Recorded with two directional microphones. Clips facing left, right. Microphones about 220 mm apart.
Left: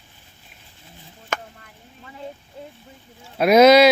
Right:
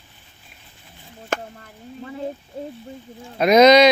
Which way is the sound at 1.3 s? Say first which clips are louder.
Right 3 dB; 40° right (ahead or behind).